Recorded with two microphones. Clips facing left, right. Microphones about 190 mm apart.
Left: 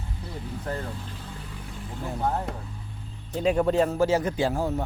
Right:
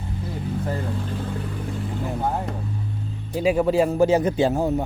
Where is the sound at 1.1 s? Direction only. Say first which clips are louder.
Right 11 dB; 60° right (ahead or behind).